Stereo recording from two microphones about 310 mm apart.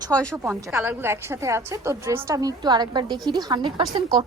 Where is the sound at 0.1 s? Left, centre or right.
Centre.